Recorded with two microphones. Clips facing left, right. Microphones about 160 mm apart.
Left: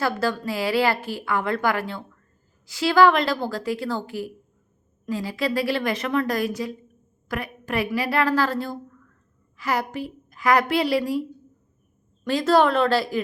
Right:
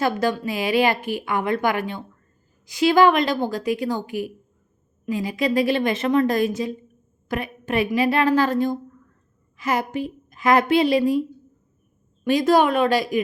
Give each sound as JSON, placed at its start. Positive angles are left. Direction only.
{"t": 0.0, "sound": "a woman's voice", "side_deg": -20}
{"t": 12.2, "sound": "speech", "side_deg": -15}